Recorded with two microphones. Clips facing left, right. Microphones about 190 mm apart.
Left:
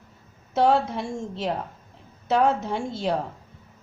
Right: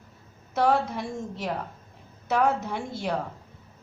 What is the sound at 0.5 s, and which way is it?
A woman's voice, 25° left (ahead or behind).